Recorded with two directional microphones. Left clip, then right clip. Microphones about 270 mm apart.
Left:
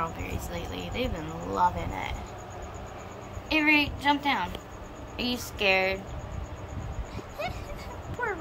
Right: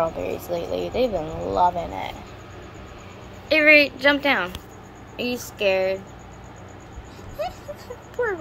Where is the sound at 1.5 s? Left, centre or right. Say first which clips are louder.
Right 6 dB; left.